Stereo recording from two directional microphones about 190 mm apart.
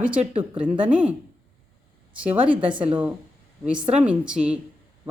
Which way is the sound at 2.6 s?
5° right (ahead or behind).